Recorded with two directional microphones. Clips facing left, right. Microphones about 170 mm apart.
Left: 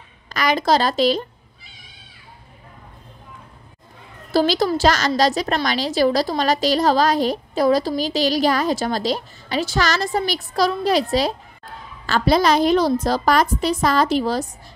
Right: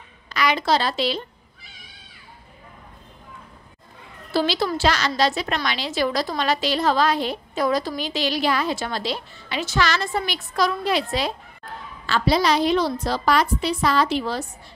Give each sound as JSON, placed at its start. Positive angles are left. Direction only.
{"t": 0.3, "sound": "a woman's voice", "side_deg": 45}
{"t": 4.3, "sound": "a woman's voice", "side_deg": 40}
{"t": 12.1, "sound": "a woman's voice", "side_deg": 45}